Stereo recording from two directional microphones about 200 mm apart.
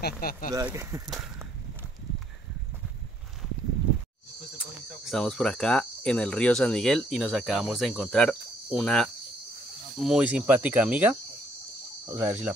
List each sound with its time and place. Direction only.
0.0 s speech: 50° left (ahead or behind)
0.5 s speech: 15° right (ahead or behind)
1.0 s a sound: centre (ahead or behind)
4.6 s speech: centre (ahead or behind)